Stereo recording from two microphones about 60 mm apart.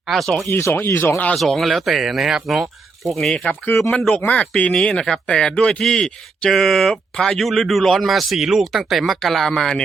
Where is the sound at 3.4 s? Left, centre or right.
Left.